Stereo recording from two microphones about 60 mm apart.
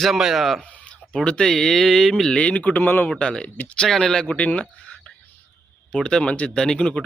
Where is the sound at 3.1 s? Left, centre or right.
Centre.